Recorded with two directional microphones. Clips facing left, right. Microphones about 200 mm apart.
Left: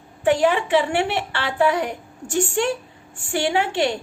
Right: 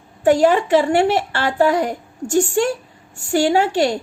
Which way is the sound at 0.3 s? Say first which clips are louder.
Right 4 dB; 40° right (ahead or behind).